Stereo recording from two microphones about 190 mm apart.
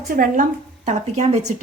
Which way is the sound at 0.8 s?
35° right (ahead or behind).